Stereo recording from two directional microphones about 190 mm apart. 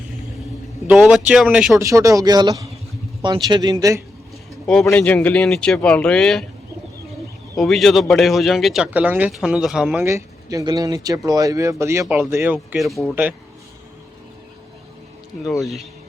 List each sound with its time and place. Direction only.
0.9 s speech: 5° right (ahead or behind)
1.7 s speech: 15° right (ahead or behind)
4.6 s a man's voice: 5° left (ahead or behind)
7.6 s speech: centre (ahead or behind)
12.5 s speech: centre (ahead or behind)
15.4 s speech: centre (ahead or behind)